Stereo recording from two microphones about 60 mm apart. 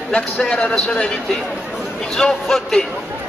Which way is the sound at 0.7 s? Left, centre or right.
Centre.